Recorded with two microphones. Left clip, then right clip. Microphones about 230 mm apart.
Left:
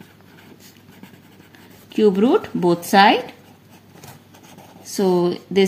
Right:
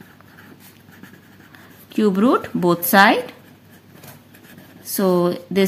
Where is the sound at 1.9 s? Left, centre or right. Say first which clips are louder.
Left 2 dB; centre.